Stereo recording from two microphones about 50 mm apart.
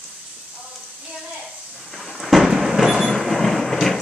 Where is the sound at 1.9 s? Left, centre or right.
Centre.